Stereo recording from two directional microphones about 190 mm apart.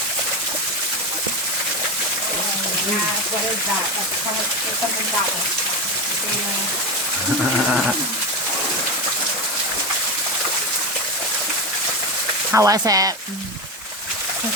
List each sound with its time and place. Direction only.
12.5 s speech: 15° right (ahead or behind)